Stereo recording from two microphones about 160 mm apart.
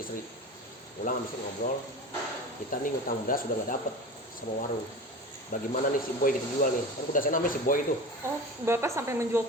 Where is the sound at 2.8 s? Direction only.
60° left (ahead or behind).